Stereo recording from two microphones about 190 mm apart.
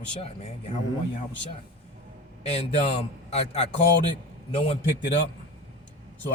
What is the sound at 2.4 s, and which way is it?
A man's voice, 35° left (ahead or behind).